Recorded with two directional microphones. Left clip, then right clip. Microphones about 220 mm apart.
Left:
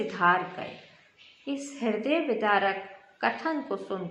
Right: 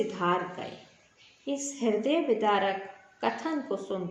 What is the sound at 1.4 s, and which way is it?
A woman's voice, 15° left (ahead or behind).